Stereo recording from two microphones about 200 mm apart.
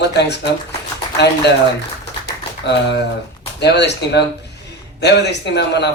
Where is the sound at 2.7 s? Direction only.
60° left (ahead or behind).